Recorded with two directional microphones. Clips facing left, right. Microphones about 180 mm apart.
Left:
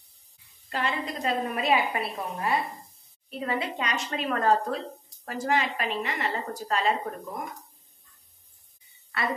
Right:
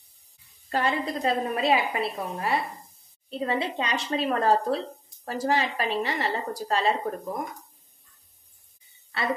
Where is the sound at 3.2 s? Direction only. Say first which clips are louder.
Right 3 dB; 25° right (ahead or behind).